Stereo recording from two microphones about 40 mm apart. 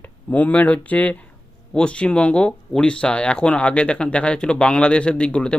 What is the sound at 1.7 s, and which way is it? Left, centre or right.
Speech, left.